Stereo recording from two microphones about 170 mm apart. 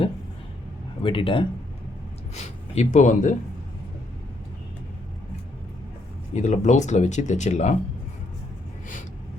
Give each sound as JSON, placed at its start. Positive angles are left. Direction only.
{"t": 1.0, "sound": "speech", "side_deg": 30}
{"t": 2.3, "sound": "speech", "side_deg": 40}
{"t": 6.3, "sound": "speech", "side_deg": 45}